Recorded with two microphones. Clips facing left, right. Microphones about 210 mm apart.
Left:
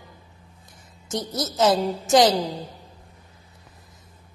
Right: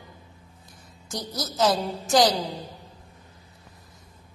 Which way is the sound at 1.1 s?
25° left (ahead or behind).